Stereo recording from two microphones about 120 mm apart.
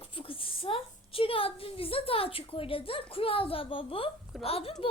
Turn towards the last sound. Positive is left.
turn(degrees=55)  # may be behind; listen again after turning